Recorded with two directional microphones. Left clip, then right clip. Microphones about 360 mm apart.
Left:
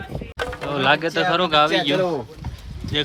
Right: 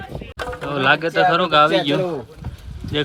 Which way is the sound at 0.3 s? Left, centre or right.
Centre.